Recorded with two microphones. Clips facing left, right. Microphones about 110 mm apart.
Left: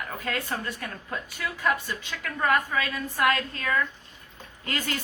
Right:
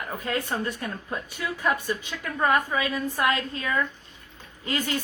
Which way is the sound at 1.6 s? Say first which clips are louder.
Right 1 dB; 20° right (ahead or behind).